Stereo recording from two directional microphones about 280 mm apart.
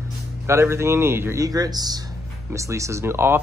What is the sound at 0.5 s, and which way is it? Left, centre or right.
Speech, centre.